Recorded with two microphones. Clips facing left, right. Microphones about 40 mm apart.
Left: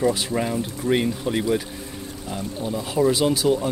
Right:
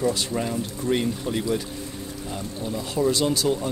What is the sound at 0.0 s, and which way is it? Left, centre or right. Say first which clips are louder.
Speech: left 3 dB; centre.